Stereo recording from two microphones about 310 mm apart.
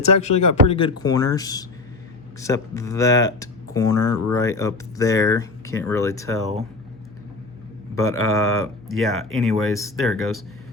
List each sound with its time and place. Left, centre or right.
0.1 s speech: left
0.7 s speech: centre
7.9 s speech: centre